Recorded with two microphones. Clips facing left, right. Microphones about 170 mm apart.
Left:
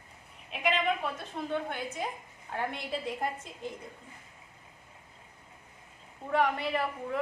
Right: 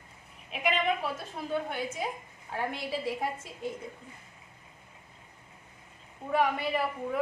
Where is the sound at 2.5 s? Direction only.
5° right (ahead or behind).